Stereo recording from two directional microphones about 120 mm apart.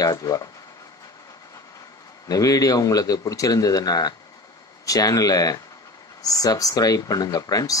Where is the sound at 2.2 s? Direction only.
30° left (ahead or behind).